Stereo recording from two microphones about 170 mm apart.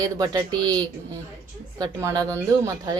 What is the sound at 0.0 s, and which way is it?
Speech, 20° right (ahead or behind).